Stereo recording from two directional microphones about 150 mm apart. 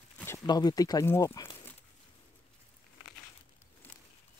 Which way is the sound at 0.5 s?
25° left (ahead or behind).